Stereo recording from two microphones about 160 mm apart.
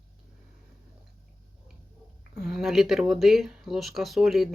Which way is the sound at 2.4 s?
5° right (ahead or behind).